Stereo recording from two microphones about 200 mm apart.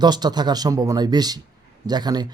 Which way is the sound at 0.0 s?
20° right (ahead or behind).